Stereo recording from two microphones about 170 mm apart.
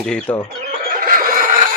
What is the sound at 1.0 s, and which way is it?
Neigh, 55° right (ahead or behind).